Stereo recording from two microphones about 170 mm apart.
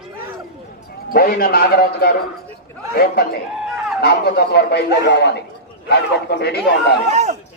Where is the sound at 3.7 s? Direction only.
5° right (ahead or behind).